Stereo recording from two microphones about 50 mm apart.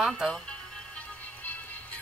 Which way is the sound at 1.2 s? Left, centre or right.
Left.